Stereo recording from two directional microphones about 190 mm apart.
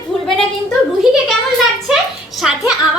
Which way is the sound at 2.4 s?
5° right (ahead or behind).